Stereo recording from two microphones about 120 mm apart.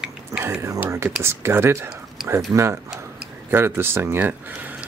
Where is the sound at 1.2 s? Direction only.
20° right (ahead or behind).